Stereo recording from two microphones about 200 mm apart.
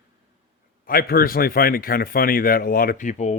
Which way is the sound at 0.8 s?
45° left (ahead or behind).